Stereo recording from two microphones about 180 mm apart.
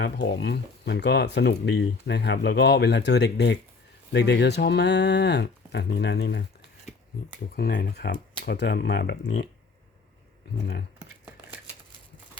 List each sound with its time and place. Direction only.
0.0 s speech: 75° left (ahead or behind)
7.5 s speech: 55° left (ahead or behind); by 9.3 s 70° left (ahead or behind)